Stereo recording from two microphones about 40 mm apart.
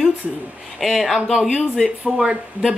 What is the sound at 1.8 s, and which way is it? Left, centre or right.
Speech, centre.